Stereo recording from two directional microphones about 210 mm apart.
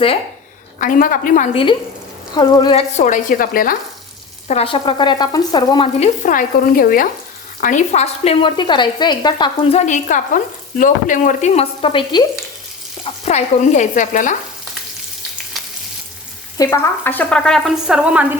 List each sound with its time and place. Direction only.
0.8 s speech: 40° left (ahead or behind)
2.3 s speech: 20° left (ahead or behind); by 3.8 s 40° left (ahead or behind)
4.4 s speech: 30° left (ahead or behind)
6.2 s speech: 40° left (ahead or behind); by 9.8 s 20° left (ahead or behind)
9.8 s speech: 35° left (ahead or behind)
13.2 s speech: 35° left (ahead or behind)
15.6 s frying: centre (ahead or behind)
16.6 s speech: 15° left (ahead or behind); by 18.3 s 5° right (ahead or behind)